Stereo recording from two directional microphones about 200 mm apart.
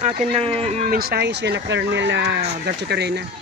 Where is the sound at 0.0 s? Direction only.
30° right (ahead or behind).